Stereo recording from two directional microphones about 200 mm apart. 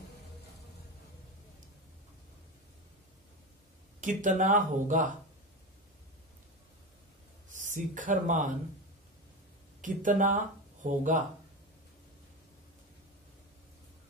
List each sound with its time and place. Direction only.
4.0 s speech: 40° right (ahead or behind)
7.4 s speech: 40° right (ahead or behind)
9.8 s speech: 40° right (ahead or behind)